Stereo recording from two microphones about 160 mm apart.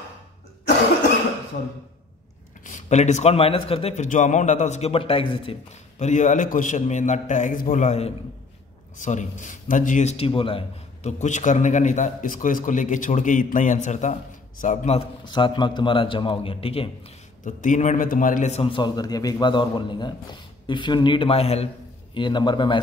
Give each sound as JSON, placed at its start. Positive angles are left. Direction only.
{"t": 2.6, "sound": "a man's voice", "side_deg": 50}
{"t": 15.2, "sound": "a man's voice", "side_deg": 30}
{"t": 17.5, "sound": "a man's voice", "side_deg": 50}
{"t": 22.1, "sound": "a man's voice", "side_deg": 30}